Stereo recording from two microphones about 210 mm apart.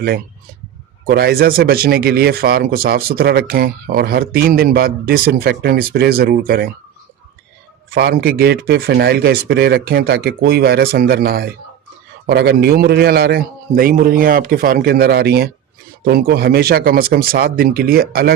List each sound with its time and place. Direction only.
1.0 s speech: 45° right (ahead or behind)
7.9 s speech: 50° right (ahead or behind)